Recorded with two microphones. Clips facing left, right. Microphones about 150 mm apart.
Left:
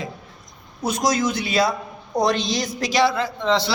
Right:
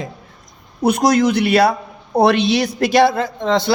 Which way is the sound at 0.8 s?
60° right (ahead or behind).